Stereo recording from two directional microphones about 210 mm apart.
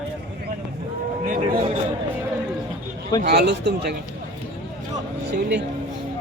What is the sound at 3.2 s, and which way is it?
Speech, 50° right (ahead or behind).